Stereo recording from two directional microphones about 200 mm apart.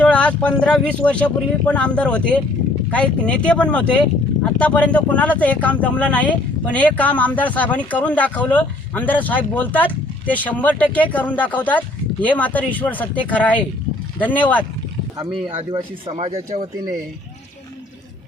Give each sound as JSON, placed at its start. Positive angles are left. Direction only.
{"t": 0.0, "sound": "speech", "side_deg": 5}
{"t": 15.4, "sound": "speech", "side_deg": -25}